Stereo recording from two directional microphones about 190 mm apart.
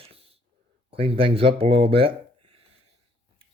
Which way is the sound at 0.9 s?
30° right (ahead or behind).